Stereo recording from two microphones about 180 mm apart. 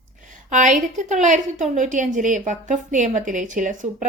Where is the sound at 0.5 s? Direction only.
45° right (ahead or behind).